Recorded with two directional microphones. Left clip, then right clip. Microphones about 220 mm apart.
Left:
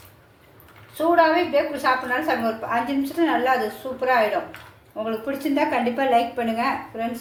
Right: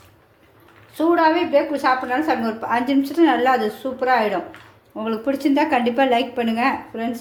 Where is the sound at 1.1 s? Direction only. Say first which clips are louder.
Right 1 dB; 50° right (ahead or behind).